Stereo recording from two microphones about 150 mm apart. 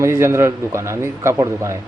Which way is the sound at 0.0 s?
20° right (ahead or behind).